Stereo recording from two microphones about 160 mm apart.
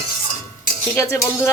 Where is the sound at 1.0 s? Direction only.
15° left (ahead or behind).